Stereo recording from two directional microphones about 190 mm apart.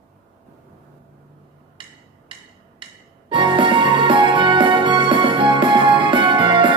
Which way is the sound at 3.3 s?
25° right (ahead or behind).